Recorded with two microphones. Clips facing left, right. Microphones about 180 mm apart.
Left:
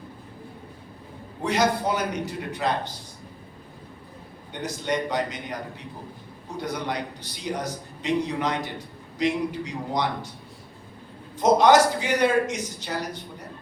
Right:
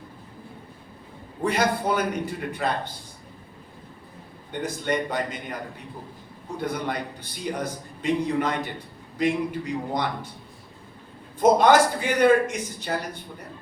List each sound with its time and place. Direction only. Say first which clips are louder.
1.5 s a man's voice: even; 55° right (ahead or behind)
4.6 s a man's voice: even; 50° right (ahead or behind)
6.6 s a man's voice: right 1 dB; 55° right (ahead or behind)
11.4 s a man's voice: even; 55° right (ahead or behind)